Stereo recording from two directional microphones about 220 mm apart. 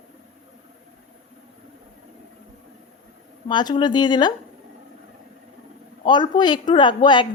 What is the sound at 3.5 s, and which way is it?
Speech, 20° left (ahead or behind).